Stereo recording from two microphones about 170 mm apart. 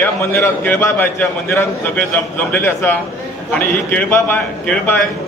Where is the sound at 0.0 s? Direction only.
15° left (ahead or behind).